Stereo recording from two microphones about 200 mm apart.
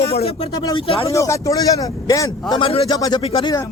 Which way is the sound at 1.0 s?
15° left (ahead or behind).